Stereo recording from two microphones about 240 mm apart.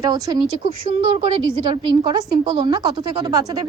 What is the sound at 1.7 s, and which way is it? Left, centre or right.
A woman's voice, centre.